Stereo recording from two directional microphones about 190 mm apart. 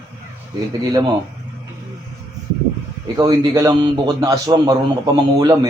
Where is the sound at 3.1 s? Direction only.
20° right (ahead or behind).